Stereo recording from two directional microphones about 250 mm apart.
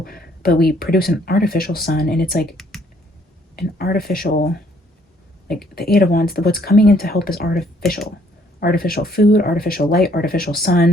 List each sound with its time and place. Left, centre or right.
0.0 s speech: left
5.7 s speech: left
8.6 s speech: left